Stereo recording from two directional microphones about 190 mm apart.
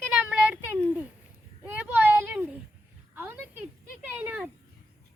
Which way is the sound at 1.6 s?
10° right (ahead or behind).